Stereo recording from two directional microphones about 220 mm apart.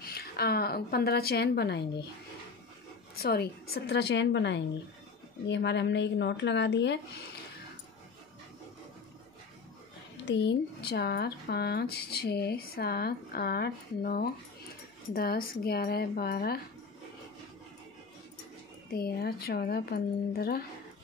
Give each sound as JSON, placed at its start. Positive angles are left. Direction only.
{"t": 0.0, "sound": "speech", "side_deg": 45}
{"t": 3.2, "sound": "speech", "side_deg": 45}
{"t": 10.2, "sound": "speech", "side_deg": 50}
{"t": 18.9, "sound": "speech", "side_deg": 45}